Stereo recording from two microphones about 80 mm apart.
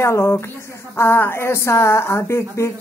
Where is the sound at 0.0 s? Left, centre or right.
Left.